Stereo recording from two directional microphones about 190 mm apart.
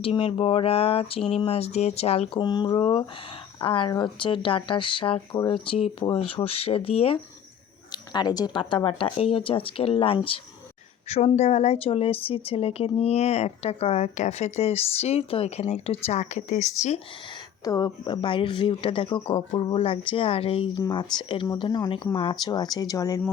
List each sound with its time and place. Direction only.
0.0 s speech: 30° left (ahead or behind)
17.7 s speech: 20° left (ahead or behind)